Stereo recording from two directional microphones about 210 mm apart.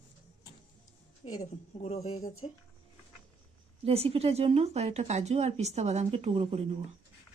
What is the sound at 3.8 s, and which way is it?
Speech, 30° right (ahead or behind).